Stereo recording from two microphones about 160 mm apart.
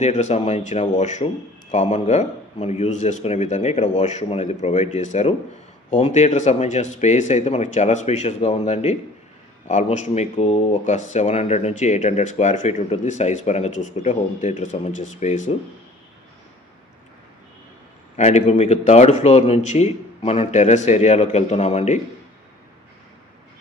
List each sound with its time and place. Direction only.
0.0 s speech: 45° left (ahead or behind)
18.1 s speech: 45° left (ahead or behind)